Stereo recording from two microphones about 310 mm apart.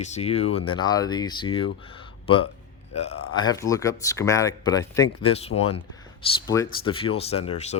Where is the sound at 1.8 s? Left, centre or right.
Centre.